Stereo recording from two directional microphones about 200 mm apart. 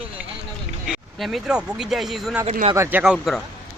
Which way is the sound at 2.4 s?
30° right (ahead or behind).